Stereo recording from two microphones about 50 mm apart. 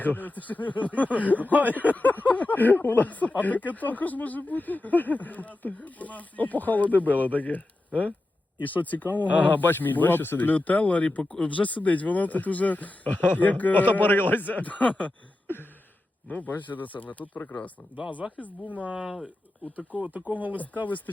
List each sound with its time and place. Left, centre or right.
0.0 s speech: left
1.5 s speech: right
1.8 s speech: left
8.6 s speech: left
11.2 s speech: centre
11.4 s speech: left
16.3 s speech: left
18.2 s speech: centre
20.1 s speech: right
20.6 s speech: left